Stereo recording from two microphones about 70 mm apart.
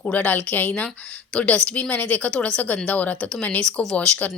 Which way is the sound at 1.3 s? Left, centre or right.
Centre.